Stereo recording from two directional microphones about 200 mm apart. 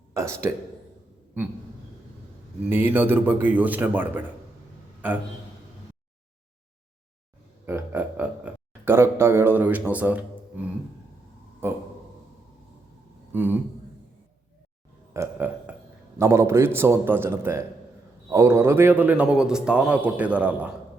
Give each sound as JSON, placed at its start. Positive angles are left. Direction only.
{"t": 0.1, "sound": "speech", "side_deg": -15}
{"t": 2.6, "sound": "a man's voice", "side_deg": -10}
{"t": 7.6, "sound": "a man's voice", "side_deg": -10}
{"t": 11.6, "sound": "a man's voice", "side_deg": -10}
{"t": 13.3, "sound": "a man's voice", "side_deg": -10}
{"t": 15.1, "sound": "burping", "side_deg": -10}
{"t": 16.1, "sound": "a man's voice", "side_deg": -15}